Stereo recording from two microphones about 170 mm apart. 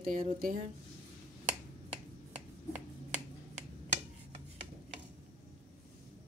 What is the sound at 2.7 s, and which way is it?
Finger snapping, 45° right (ahead or behind).